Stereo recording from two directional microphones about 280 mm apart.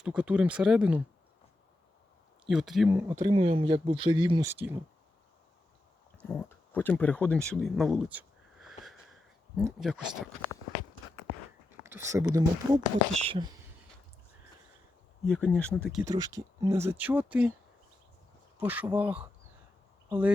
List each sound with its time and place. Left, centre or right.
0.0 s speech: centre
2.5 s speech: centre
6.2 s speech: centre
8.6 s sniff: centre
9.6 s speech: centre
11.8 s speech: centre
15.2 s speech: centre
16.0 s speech: centre
18.6 s speech: centre